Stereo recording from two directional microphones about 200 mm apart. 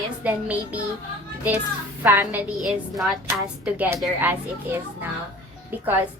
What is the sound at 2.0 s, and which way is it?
A woman's voice, 10° right (ahead or behind).